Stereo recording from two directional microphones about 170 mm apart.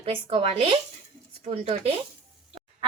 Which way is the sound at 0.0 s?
35° right (ahead or behind).